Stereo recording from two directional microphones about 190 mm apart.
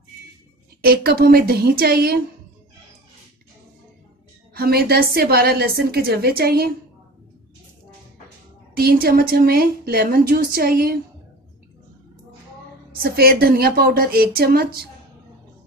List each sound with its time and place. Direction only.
0.8 s a woman's voice: 55° right (ahead or behind)
4.6 s a woman's voice: 55° right (ahead or behind)
8.7 s a woman's voice: 50° right (ahead or behind)
13.0 s a woman's voice: 50° right (ahead or behind)